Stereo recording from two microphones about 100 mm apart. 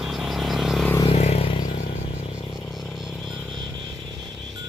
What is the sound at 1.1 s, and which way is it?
Vehicle, 90° left.